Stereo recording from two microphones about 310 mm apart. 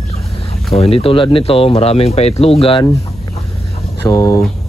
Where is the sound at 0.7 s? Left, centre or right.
Centre.